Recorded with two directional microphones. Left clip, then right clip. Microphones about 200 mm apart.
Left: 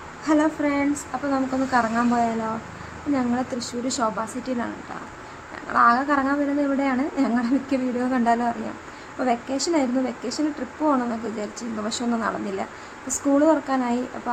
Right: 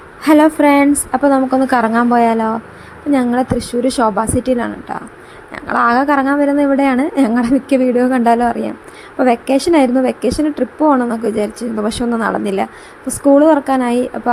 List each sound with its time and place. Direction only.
0.2 s a woman's voice: 40° right (ahead or behind)